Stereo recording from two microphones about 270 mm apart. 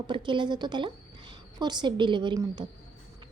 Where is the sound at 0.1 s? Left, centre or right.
Centre.